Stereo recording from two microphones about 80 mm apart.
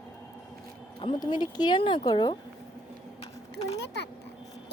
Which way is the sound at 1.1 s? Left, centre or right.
Left.